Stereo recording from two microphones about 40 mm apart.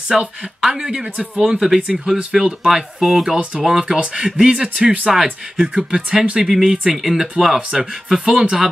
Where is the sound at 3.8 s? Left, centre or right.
Right.